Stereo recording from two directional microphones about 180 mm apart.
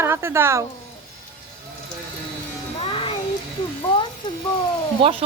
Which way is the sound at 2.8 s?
30° left (ahead or behind).